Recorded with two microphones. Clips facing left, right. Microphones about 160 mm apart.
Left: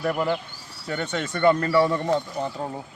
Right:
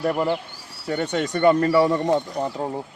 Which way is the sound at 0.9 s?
35° right (ahead or behind).